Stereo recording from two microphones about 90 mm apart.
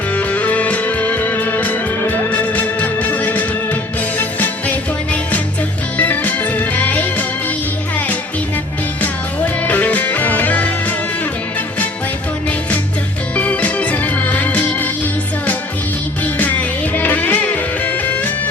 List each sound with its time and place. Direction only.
0.1 s music: 15° left (ahead or behind)
6.0 s music: 20° left (ahead or behind)
9.0 s music: 20° left (ahead or behind)
13.3 s organ: 15° left (ahead or behind)
16.2 s music: 20° left (ahead or behind)